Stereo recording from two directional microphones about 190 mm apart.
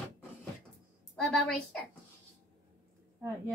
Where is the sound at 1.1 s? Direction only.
Centre (ahead or behind).